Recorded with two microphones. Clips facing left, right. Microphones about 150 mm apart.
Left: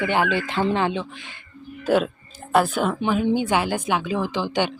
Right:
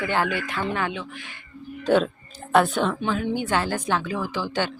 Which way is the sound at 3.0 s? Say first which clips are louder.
Left 4 dB; 15° left (ahead or behind).